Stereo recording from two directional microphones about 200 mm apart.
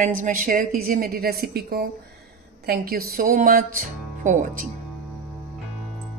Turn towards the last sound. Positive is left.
turn(degrees=-40)  # may be behind; listen again after turning